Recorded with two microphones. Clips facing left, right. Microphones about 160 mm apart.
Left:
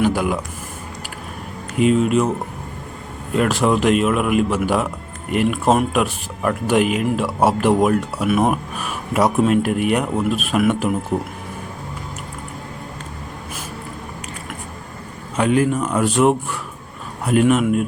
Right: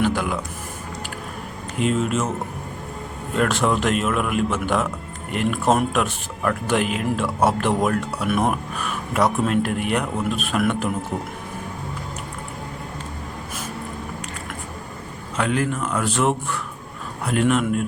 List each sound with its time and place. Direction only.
0.0 s speech: 10° left (ahead or behind)
1.8 s speech: 5° left (ahead or behind)
3.3 s speech: 5° left (ahead or behind)
15.4 s speech: 15° left (ahead or behind)
17.3 s speech: 10° left (ahead or behind)